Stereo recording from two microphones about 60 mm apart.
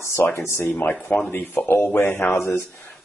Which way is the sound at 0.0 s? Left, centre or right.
Left.